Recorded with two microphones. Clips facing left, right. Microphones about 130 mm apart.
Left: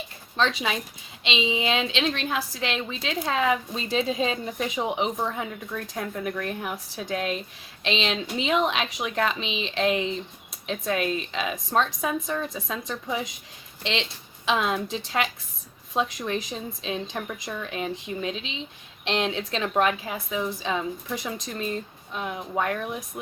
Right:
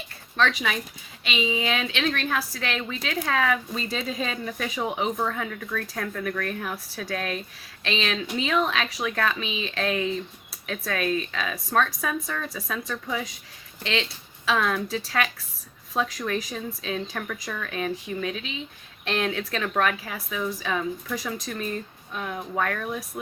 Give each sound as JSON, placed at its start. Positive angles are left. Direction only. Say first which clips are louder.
{"t": 0.3, "sound": "a woman's voice", "louder": "even", "side_deg": 25}